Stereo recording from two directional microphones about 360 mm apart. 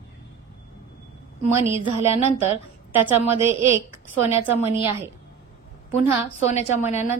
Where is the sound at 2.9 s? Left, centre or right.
Centre.